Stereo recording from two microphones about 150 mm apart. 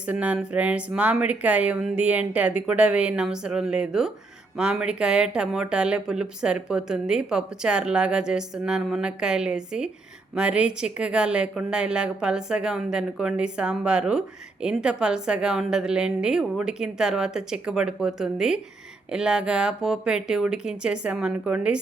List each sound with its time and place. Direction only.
0.0 s speech: 10° right (ahead or behind)